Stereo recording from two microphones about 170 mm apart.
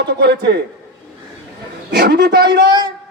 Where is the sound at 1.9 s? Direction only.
70° right (ahead or behind).